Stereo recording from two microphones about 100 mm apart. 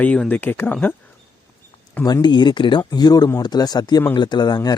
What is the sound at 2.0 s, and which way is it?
Speech, 45° left (ahead or behind).